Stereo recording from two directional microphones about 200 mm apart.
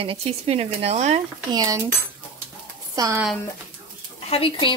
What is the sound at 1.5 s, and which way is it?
Speech, 15° right (ahead or behind).